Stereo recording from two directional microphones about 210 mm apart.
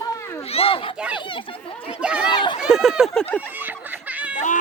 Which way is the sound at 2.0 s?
5° right (ahead or behind).